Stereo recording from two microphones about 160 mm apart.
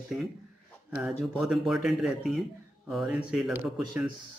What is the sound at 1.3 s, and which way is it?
A man's voice, centre (ahead or behind).